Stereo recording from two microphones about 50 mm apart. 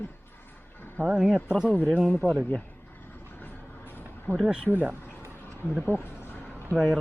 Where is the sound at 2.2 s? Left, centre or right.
Left.